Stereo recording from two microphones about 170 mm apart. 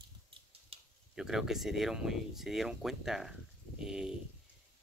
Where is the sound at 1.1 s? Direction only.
5° right (ahead or behind).